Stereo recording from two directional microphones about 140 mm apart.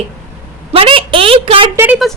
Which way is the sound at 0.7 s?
40° right (ahead or behind).